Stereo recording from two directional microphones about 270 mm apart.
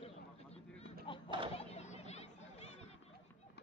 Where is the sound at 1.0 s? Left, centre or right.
Centre.